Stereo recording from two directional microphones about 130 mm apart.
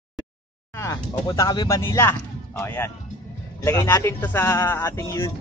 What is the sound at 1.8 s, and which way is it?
Speech, 20° left (ahead or behind).